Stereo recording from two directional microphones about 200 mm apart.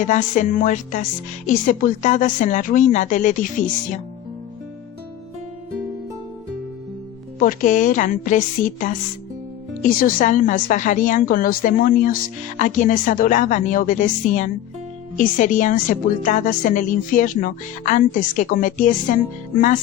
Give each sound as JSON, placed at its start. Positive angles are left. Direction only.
{"t": 0.0, "sound": "a woman's voice", "side_deg": 40}
{"t": 7.3, "sound": "a woman's voice", "side_deg": 40}